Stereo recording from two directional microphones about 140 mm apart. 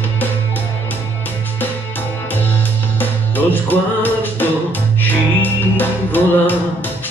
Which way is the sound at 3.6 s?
15° left (ahead or behind).